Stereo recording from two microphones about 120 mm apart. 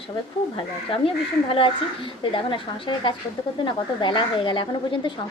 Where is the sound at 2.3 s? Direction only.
45° left (ahead or behind).